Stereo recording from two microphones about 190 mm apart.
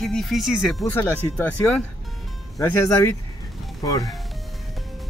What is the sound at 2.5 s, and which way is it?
Speech, 10° left (ahead or behind).